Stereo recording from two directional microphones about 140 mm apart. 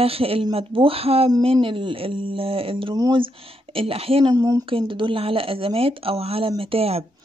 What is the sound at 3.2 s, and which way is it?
Speech, 40° right (ahead or behind).